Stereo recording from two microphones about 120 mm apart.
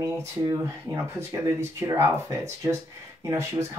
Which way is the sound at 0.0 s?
25° right (ahead or behind).